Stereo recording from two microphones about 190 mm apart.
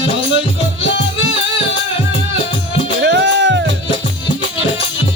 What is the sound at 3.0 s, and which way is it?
Music, 65° right (ahead or behind).